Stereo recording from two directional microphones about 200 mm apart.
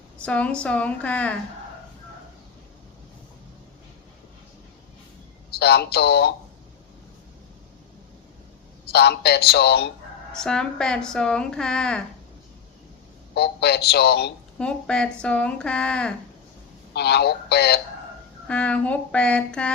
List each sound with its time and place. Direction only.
0.3 s speech: 5° left (ahead or behind)
5.5 s a man's voice: 55° left (ahead or behind)
8.9 s a man's voice: 55° left (ahead or behind)
10.3 s a woman's voice: 5° left (ahead or behind)
13.3 s a man's voice: 55° left (ahead or behind)
14.6 s a woman's voice: 5° left (ahead or behind)
16.9 s a man's voice: 55° left (ahead or behind)
18.4 s speech: 5° left (ahead or behind)